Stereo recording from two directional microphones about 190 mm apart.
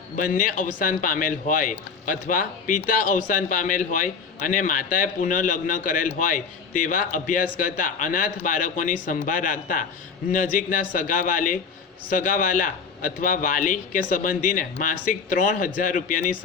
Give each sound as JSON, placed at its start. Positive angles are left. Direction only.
{"t": 0.2, "sound": "a man's voice", "side_deg": 45}